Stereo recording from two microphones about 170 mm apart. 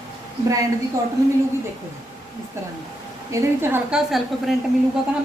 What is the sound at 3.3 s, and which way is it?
A woman's voice, 15° right (ahead or behind).